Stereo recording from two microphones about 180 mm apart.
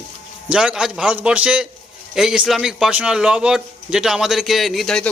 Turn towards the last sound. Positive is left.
turn(degrees=0)  # may be behind; listen again after turning